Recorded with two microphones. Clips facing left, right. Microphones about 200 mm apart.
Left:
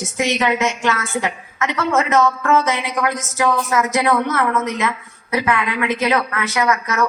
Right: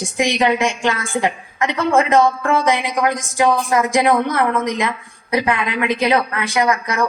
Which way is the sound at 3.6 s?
30° right (ahead or behind).